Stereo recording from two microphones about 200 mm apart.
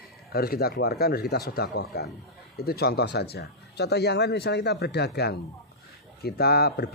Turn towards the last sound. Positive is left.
turn(degrees=50)  # may be behind; listen again after turning